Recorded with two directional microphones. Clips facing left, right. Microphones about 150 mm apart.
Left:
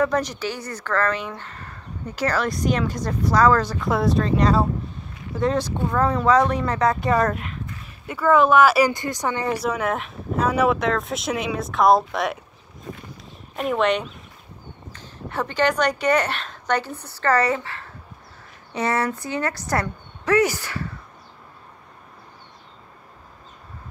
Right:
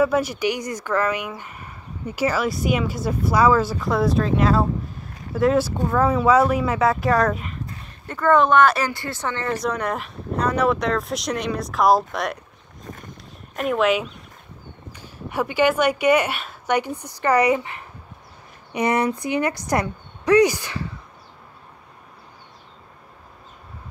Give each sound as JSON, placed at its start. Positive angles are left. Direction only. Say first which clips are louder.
{"t": 0.0, "sound": "a woman's voice", "louder": "right 3 dB", "side_deg": -5}
{"t": 13.6, "sound": "speech", "louder": "right 1 dB", "side_deg": 0}
{"t": 14.9, "sound": "a woman's voice", "louder": "right 1 dB", "side_deg": -10}